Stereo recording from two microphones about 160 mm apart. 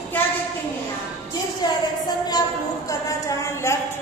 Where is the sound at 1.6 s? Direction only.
25° left (ahead or behind).